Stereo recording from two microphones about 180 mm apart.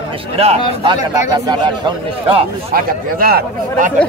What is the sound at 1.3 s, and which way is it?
A man's voice, 25° right (ahead or behind).